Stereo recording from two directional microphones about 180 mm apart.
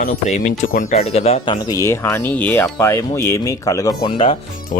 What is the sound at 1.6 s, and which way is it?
Speech, 15° left (ahead or behind).